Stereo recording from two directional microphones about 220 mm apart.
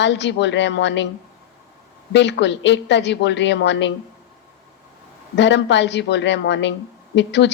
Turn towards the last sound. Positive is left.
turn(degrees=55)  # may be behind; listen again after turning